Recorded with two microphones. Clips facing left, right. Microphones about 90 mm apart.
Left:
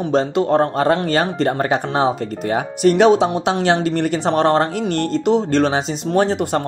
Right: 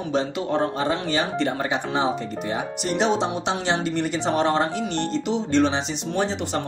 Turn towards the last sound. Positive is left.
turn(degrees=50)  # may be behind; listen again after turning